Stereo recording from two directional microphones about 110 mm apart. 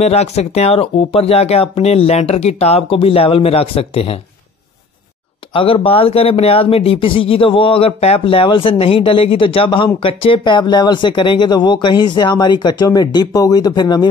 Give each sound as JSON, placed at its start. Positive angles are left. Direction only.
{"t": 0.0, "sound": "speech", "side_deg": 75}
{"t": 5.5, "sound": "speech", "side_deg": 55}